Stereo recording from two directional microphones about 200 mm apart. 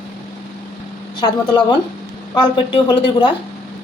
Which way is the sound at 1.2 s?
20° left (ahead or behind).